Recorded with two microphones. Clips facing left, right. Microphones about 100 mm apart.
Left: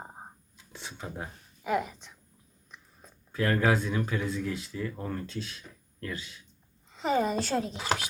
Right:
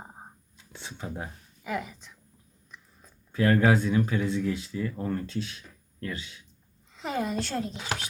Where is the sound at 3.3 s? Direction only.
25° right (ahead or behind).